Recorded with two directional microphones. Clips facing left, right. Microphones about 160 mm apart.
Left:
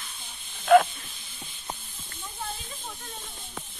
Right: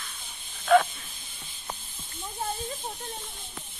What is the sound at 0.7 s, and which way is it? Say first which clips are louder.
Hiss: left 3 dB; 5° left (ahead or behind).